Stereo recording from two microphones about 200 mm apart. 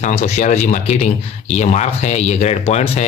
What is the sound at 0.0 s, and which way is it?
Speech, 35° left (ahead or behind).